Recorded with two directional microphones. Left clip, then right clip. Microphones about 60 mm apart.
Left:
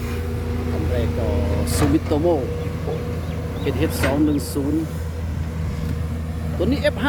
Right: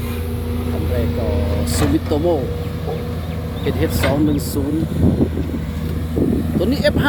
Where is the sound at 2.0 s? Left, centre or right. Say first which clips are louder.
Right 3 dB; left.